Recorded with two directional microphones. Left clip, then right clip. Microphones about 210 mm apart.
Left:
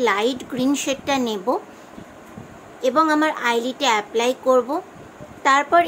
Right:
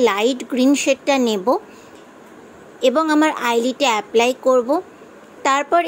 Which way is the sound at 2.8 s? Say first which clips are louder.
Right 2 dB; 25° right (ahead or behind).